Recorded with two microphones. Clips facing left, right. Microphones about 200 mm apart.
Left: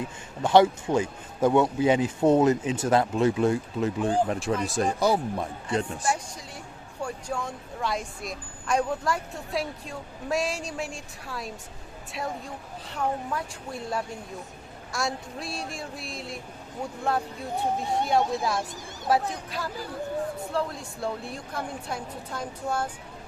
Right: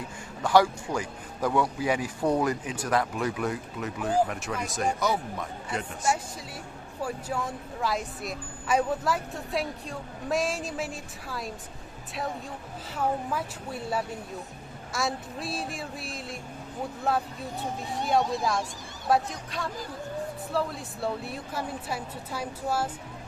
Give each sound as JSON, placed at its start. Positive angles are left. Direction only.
{"t": 0.4, "sound": "speech", "side_deg": 25}
{"t": 7.0, "sound": "a woman's voice", "side_deg": -5}
{"t": 12.9, "sound": "a woman's voice", "side_deg": -5}